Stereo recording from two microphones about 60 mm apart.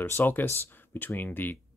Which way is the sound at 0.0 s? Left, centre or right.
Left.